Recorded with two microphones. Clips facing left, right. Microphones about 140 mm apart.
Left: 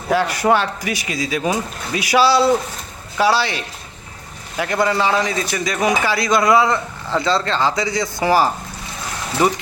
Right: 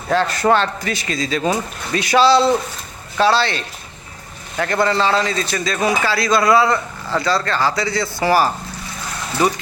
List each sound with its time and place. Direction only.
0.1 s a man's voice: 10° left (ahead or behind)